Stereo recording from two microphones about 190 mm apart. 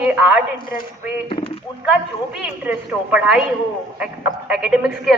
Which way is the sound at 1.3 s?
30° left (ahead or behind).